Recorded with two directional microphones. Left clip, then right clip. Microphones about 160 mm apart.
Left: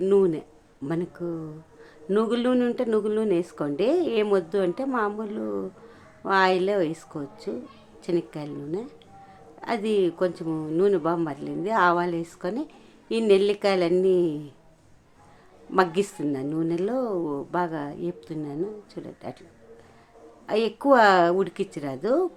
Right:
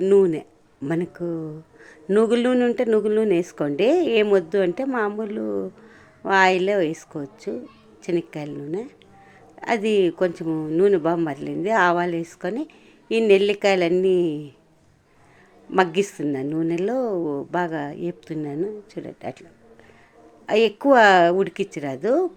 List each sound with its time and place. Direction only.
0.0 s a man's voice: 20° right (ahead or behind)
15.7 s speech: 15° right (ahead or behind)
20.5 s speech: 20° right (ahead or behind)